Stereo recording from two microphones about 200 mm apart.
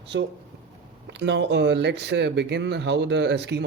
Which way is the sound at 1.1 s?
60° right (ahead or behind).